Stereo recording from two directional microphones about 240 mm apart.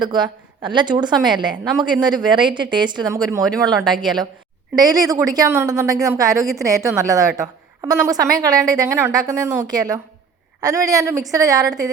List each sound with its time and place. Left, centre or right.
0.0 s a woman's voice: centre